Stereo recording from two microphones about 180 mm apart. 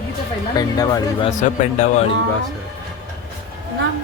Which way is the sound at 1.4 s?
40° left (ahead or behind).